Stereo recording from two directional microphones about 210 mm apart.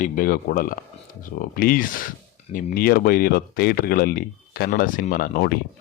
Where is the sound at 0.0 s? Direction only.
40° left (ahead or behind).